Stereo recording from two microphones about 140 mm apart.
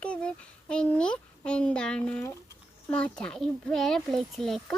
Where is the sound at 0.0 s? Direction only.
10° left (ahead or behind).